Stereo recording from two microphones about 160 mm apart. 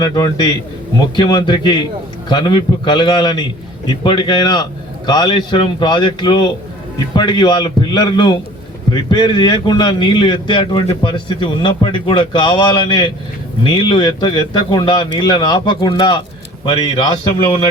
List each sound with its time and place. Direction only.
0.0 s a man's voice: 25° left (ahead or behind)